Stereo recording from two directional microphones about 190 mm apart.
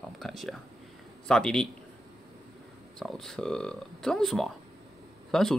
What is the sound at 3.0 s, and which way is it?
Speech, centre (ahead or behind).